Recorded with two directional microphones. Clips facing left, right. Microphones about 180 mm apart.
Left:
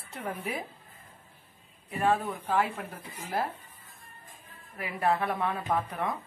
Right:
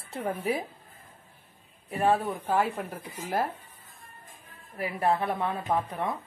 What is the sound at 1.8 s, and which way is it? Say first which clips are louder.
Speech: right 2 dB; 40° right (ahead or behind).